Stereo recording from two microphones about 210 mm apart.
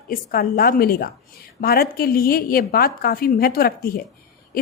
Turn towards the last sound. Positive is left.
turn(degrees=45)  # may be behind; listen again after turning